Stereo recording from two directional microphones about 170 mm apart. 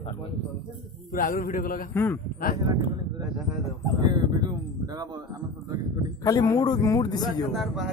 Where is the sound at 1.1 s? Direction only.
55° left (ahead or behind).